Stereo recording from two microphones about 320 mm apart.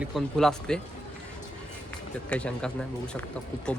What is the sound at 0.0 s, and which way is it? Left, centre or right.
Speech, centre.